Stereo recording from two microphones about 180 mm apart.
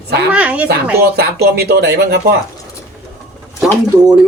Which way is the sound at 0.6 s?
60° right (ahead or behind).